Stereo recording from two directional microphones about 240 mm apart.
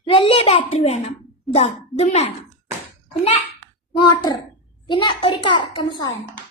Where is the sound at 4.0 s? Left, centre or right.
Centre.